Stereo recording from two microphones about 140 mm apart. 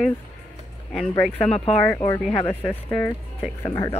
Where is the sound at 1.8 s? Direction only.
20° left (ahead or behind).